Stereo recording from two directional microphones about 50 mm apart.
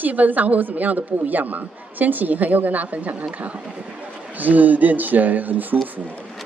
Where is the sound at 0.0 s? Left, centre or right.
Right.